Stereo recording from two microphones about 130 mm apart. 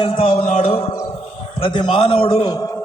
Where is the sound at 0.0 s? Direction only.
50° left (ahead or behind).